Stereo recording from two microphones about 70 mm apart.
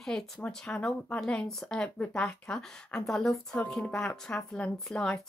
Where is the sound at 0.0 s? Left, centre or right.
Centre.